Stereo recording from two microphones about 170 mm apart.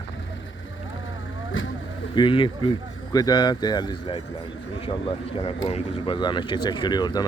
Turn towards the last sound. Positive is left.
turn(degrees=25)  # may be behind; listen again after turning